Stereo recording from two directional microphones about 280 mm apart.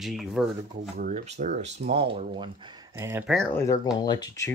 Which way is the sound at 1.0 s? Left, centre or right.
Right.